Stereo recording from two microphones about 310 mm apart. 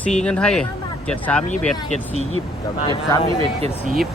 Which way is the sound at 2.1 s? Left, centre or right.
Right.